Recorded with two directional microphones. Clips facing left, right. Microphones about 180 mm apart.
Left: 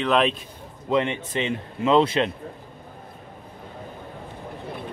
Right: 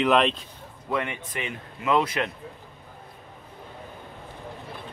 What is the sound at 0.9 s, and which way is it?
A man's voice, 25° left (ahead or behind).